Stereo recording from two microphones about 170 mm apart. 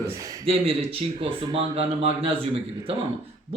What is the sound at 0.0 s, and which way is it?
Speech, 20° right (ahead or behind).